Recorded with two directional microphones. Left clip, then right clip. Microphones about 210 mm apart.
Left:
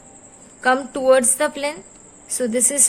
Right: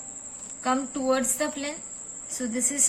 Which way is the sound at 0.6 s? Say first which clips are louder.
Left 9 dB; 50° left (ahead or behind).